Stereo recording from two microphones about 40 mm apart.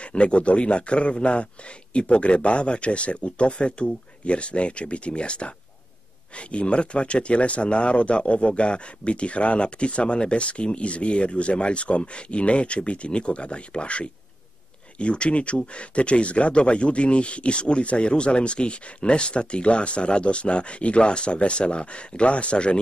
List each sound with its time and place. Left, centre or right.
0.0 s speech: left